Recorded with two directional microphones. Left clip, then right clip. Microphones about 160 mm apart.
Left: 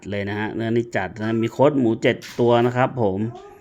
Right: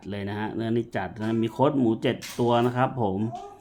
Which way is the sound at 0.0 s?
25° left (ahead or behind).